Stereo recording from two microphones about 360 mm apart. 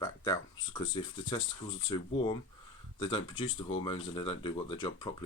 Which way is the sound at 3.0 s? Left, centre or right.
Centre.